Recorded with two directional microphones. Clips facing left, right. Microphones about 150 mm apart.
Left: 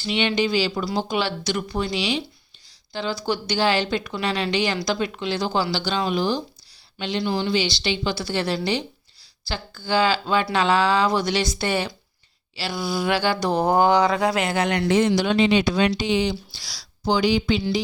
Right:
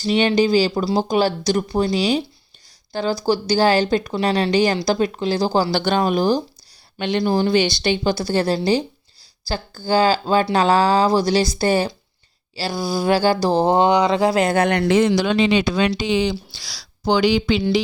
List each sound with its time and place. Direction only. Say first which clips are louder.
0.0 s speech: right 6 dB; 40° right (ahead or behind)
5.7 s speech: right 5 dB; 50° right (ahead or behind); by 14.4 s 30° right (ahead or behind)
14.4 s speech: right 5 dB; 50° right (ahead or behind)
14.8 s speech: right 3 dB; 90° right; by 17.8 s 75° right (ahead or behind)